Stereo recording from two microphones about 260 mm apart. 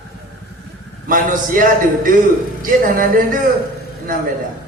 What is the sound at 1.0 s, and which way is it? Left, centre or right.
A man's voice, right.